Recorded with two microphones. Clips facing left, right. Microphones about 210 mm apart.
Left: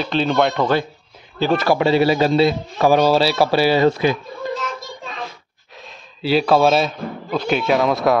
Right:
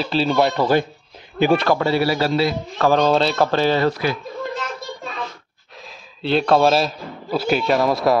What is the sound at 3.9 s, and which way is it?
Speech, 20° left (ahead or behind).